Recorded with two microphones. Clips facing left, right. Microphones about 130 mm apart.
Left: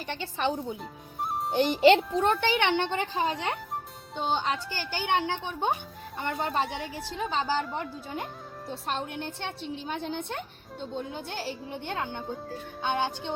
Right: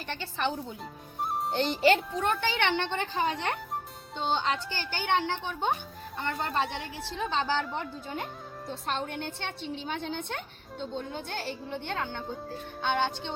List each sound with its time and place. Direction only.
0.1 s speech: 15° left (ahead or behind)
1.2 s music: centre (ahead or behind)
1.5 s a child's voice: 15° left (ahead or behind)
2.7 s a woman's voice: 5° left (ahead or behind)
6.3 s a woman's voice: 5° left (ahead or behind)